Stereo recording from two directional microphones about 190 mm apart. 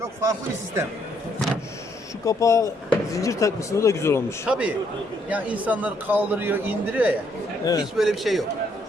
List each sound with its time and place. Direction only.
0.0 s speech: 15° right (ahead or behind)
2.2 s speech: 15° left (ahead or behind)
4.4 s a man's voice: 5° right (ahead or behind)
7.6 s a man's voice: 20° left (ahead or behind)
7.9 s a man's voice: centre (ahead or behind)